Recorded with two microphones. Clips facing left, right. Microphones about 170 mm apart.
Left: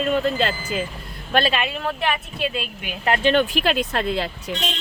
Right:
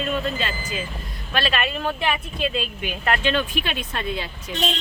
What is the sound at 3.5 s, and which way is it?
Speech, 75° left (ahead or behind).